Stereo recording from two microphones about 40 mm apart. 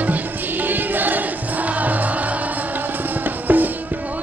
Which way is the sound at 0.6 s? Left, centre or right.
Right.